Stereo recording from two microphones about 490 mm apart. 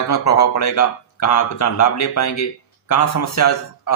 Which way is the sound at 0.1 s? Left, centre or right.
Left.